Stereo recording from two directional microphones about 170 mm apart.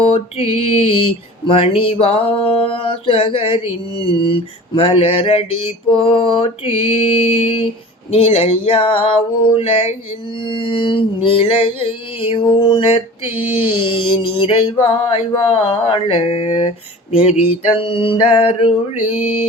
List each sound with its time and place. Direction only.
0.1 s mantra: 35° left (ahead or behind)